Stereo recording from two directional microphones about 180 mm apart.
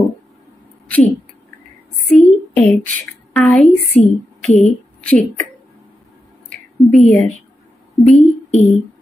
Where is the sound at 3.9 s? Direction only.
40° left (ahead or behind).